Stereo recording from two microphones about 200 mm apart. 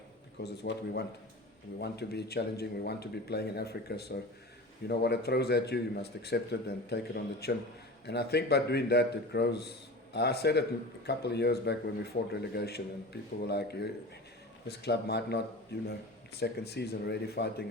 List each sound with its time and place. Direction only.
0.4 s a man's voice: 55° left (ahead or behind)